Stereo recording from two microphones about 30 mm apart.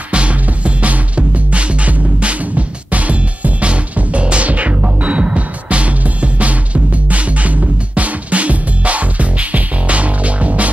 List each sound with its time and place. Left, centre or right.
0.1 s music: right